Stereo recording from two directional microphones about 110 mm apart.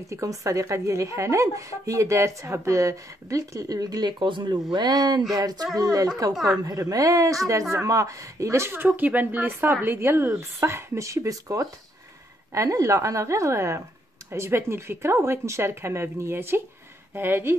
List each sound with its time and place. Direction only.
0.1 s a woman's voice: 30° right (ahead or behind)
6.3 s a woman's voice: centre (ahead or behind)
6.6 s a woman's voice: 30° right (ahead or behind)